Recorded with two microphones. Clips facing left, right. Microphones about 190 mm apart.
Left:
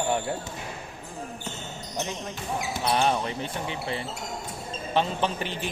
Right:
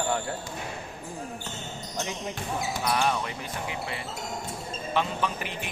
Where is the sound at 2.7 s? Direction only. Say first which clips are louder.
Left 3 dB; 25° left (ahead or behind).